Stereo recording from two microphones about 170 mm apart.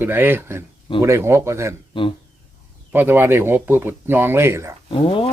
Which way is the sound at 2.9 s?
10° right (ahead or behind).